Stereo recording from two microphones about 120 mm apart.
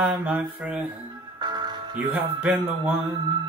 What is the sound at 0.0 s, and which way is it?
Music, 10° right (ahead or behind).